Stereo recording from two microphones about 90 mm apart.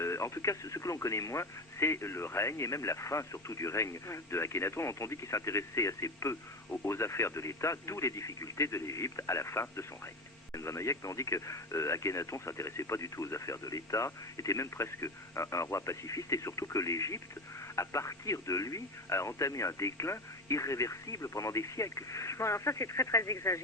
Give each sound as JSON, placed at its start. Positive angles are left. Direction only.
{"t": 0.0, "sound": "speech", "side_deg": 35}